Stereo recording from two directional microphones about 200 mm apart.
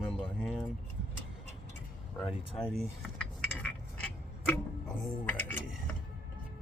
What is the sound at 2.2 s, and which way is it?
Cutlery, centre (ahead or behind).